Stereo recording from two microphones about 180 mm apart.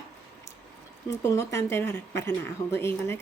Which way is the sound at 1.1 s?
15° left (ahead or behind).